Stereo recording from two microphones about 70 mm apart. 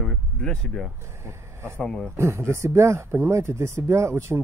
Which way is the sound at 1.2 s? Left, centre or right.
Right.